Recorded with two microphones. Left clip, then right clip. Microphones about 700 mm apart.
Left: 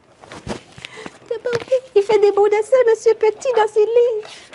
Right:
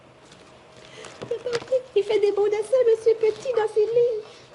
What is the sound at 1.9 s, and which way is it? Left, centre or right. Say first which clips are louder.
A woman's voice: left 8 dB; left.